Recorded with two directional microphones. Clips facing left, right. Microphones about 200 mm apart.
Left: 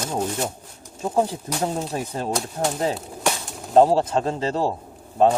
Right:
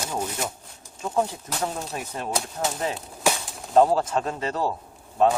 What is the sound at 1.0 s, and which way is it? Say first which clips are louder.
A man's voice: left 3 dB; 30° left (ahead or behind).